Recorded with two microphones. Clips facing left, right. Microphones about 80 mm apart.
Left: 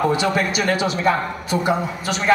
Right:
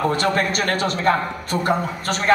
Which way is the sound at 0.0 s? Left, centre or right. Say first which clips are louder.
Left 1 dB; centre.